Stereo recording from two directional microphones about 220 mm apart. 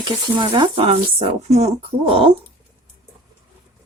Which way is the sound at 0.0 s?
20° right (ahead or behind).